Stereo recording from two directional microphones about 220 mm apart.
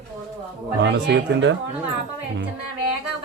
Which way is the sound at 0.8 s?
55° right (ahead or behind).